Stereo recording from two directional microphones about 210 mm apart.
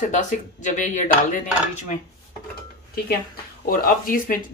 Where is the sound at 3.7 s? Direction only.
40° left (ahead or behind).